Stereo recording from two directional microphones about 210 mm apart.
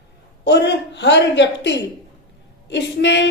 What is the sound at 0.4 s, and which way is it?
A woman's voice, 55° left (ahead or behind).